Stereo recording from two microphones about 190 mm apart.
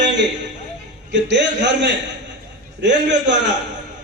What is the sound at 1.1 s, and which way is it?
A man's voice, 65° right (ahead or behind).